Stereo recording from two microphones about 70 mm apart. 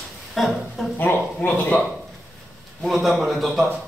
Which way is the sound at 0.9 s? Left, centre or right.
Left.